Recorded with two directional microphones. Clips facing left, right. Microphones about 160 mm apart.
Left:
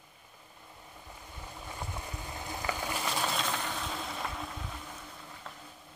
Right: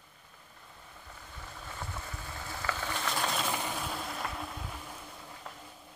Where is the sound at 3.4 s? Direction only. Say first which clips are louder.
Right 1 dB; 10° right (ahead or behind).